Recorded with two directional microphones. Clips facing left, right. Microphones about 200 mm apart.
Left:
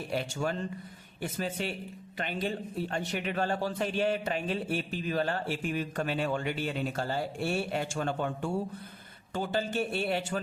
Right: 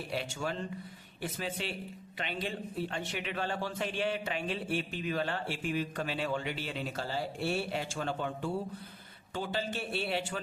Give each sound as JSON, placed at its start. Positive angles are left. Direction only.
{"t": 0.1, "sound": "a man's voice", "side_deg": 45}